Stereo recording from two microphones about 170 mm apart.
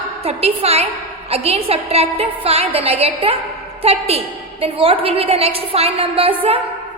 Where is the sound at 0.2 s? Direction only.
35° right (ahead or behind).